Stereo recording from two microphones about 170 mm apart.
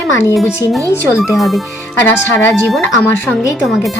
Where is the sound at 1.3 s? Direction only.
Centre (ahead or behind).